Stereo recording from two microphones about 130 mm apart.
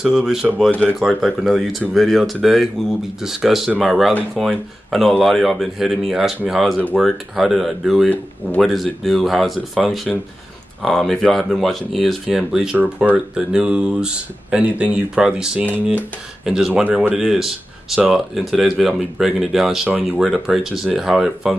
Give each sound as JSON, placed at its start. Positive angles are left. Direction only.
{"t": 0.0, "sound": "speech", "side_deg": -5}
{"t": 16.8, "sound": "speech", "side_deg": -15}
{"t": 17.1, "sound": "speech", "side_deg": 0}